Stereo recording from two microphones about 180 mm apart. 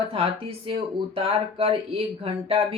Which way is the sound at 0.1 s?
30° right (ahead or behind).